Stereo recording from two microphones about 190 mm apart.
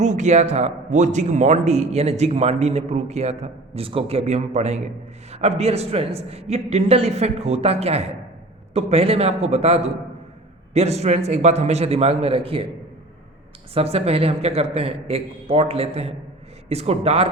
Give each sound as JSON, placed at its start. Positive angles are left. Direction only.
{"t": 0.0, "sound": "speech", "side_deg": -40}
{"t": 13.7, "sound": "speech", "side_deg": -30}